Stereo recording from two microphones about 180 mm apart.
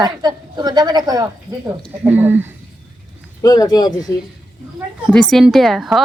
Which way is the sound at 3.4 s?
20° left (ahead or behind).